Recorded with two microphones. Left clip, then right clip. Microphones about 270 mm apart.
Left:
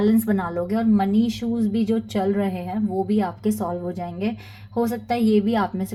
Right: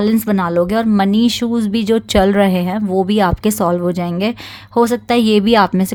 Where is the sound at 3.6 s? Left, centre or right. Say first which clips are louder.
Right 12 dB; right.